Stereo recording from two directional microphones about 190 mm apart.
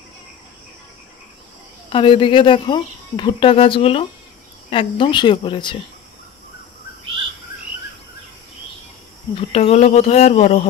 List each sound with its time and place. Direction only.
1.9 s speech: 25° left (ahead or behind)
9.3 s speech: 35° left (ahead or behind)